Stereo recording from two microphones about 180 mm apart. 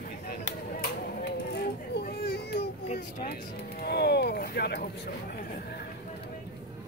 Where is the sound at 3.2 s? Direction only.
60° left (ahead or behind).